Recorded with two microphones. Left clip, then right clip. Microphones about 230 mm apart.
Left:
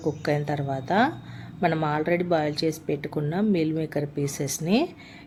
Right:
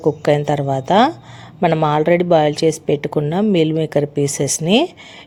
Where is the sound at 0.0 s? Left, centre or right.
Right.